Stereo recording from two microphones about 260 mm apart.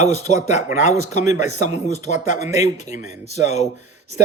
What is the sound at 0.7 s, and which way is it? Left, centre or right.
Speech, centre.